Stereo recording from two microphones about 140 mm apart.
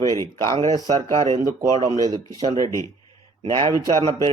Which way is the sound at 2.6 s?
20° left (ahead or behind).